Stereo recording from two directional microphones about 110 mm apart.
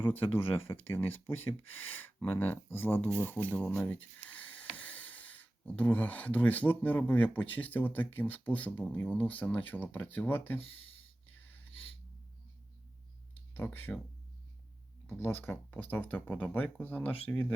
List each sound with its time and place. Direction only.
0.0 s speech: 20° left (ahead or behind)
13.5 s speech: 15° left (ahead or behind)
15.0 s speech: 15° left (ahead or behind)